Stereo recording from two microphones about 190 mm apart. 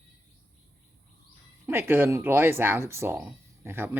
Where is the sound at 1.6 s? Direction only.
15° right (ahead or behind).